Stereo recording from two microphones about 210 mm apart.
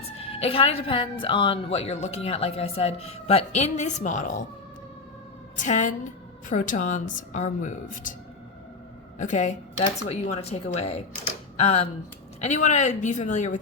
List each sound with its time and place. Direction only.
0.2 s a woman's voice: 25° left (ahead or behind)
5.5 s a woman's voice: 35° left (ahead or behind)
9.1 s a woman's voice: 35° left (ahead or behind)